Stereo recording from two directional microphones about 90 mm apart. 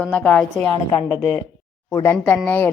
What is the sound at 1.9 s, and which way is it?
Speech, 35° left (ahead or behind).